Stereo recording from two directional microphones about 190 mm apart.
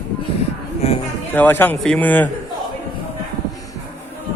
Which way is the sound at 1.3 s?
10° left (ahead or behind).